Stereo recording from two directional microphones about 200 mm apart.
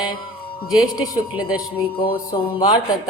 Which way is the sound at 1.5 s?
20° left (ahead or behind).